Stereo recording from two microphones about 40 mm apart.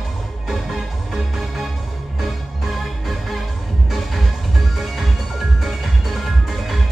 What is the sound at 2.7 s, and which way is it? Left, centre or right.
Music, centre.